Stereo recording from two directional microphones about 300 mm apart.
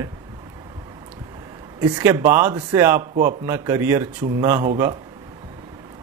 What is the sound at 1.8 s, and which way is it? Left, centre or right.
Speech, centre.